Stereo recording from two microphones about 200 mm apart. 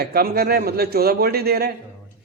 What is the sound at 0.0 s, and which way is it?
Speech, 50° right (ahead or behind).